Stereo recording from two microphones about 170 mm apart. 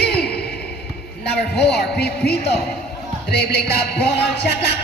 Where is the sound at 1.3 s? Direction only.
75° left (ahead or behind).